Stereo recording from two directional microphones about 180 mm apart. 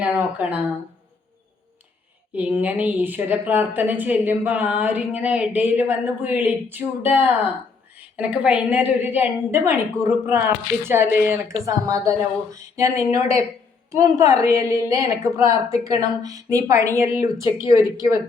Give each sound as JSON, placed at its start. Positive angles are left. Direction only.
{"t": 0.0, "sound": "a woman's voice", "side_deg": -10}
{"t": 2.3, "sound": "a woman's voice", "side_deg": -10}